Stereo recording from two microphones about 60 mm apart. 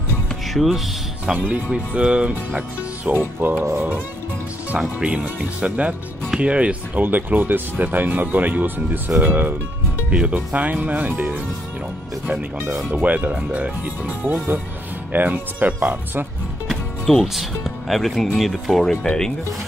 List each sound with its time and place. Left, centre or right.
1.2 s speech: right
3.1 s speech: right
4.6 s speech: centre
7.0 s speech: right
10.0 s speech: right
17.1 s speech: centre